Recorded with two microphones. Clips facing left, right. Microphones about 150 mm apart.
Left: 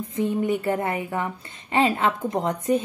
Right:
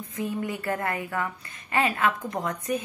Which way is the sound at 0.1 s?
25° left (ahead or behind).